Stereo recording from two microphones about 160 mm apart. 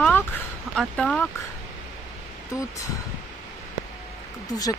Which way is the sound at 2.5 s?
20° left (ahead or behind).